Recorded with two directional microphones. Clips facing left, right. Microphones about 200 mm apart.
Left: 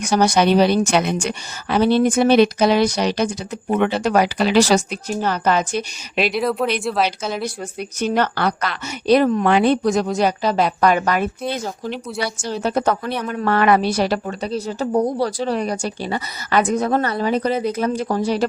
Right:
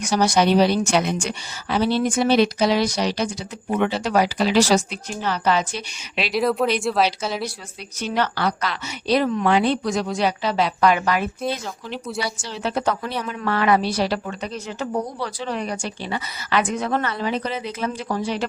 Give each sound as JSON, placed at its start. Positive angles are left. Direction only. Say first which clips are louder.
{"t": 0.0, "sound": "speech", "louder": "left 2 dB", "side_deg": 60}
{"t": 5.0, "sound": "speech", "louder": "left 3 dB", "side_deg": 45}
{"t": 6.3, "sound": "a woman's voice", "louder": "right 5 dB", "side_deg": 0}
{"t": 7.8, "sound": "a woman's voice", "louder": "left 4 dB", "side_deg": 50}